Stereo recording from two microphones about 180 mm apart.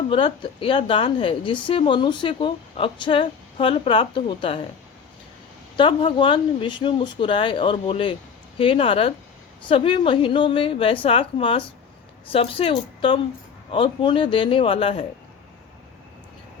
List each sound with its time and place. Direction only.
0.4 s speech: 30° left (ahead or behind)
5.7 s a woman's voice: 30° left (ahead or behind)